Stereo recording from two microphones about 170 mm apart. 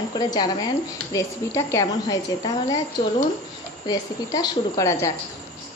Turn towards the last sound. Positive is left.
turn(degrees=20)  # may be behind; listen again after turning